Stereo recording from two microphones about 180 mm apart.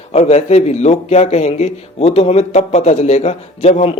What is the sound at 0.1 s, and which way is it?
A man's voice, 35° left (ahead or behind).